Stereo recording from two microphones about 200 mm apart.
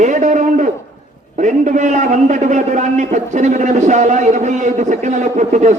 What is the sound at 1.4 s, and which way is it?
A man's voice, 40° right (ahead or behind).